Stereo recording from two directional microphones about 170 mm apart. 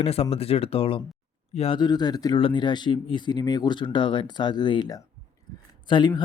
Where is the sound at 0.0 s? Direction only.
35° left (ahead or behind).